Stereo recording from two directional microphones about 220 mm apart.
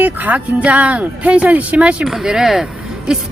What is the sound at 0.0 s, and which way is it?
Speech, 5° right (ahead or behind).